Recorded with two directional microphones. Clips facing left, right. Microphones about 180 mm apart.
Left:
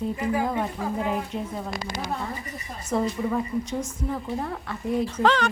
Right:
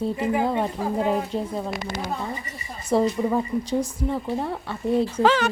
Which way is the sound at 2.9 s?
30° right (ahead or behind).